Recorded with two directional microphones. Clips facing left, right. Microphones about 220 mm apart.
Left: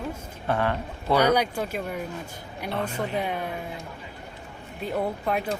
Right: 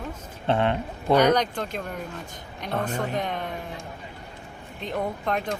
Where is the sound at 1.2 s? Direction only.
10° left (ahead or behind).